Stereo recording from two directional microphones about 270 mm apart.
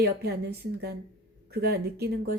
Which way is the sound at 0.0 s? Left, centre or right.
Right.